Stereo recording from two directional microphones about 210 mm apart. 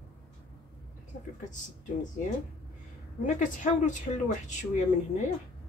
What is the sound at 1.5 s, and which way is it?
Speech, 35° left (ahead or behind).